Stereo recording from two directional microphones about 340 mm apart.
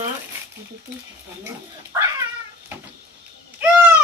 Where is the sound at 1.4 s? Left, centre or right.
Centre.